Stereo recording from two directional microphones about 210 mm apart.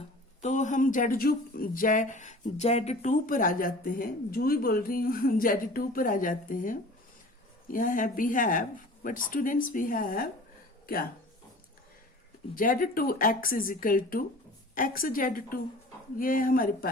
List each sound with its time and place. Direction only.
0.4 s speech: 35° left (ahead or behind)
12.5 s speech: 40° left (ahead or behind)